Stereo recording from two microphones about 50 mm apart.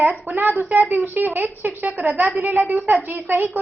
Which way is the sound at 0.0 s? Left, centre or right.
Right.